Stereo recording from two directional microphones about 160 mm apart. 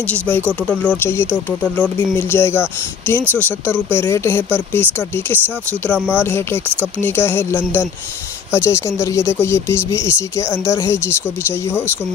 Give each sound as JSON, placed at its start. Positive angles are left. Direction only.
{"t": 0.0, "sound": "speech", "side_deg": 10}